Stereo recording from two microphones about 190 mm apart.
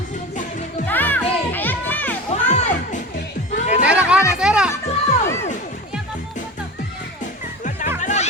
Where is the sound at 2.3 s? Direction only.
35° left (ahead or behind).